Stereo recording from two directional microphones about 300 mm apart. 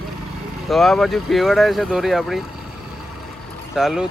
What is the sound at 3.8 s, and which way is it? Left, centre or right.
Speech, centre.